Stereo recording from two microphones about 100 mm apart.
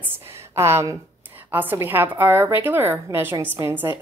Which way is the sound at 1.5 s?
20° right (ahead or behind).